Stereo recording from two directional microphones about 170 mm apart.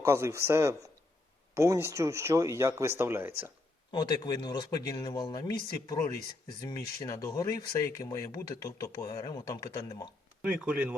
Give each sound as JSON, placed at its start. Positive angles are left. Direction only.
{"t": 0.0, "sound": "speech", "side_deg": -15}
{"t": 3.9, "sound": "speech", "side_deg": 25}
{"t": 10.4, "sound": "speech", "side_deg": -5}